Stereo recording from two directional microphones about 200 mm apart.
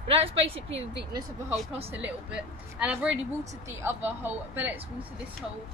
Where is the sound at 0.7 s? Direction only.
65° right (ahead or behind).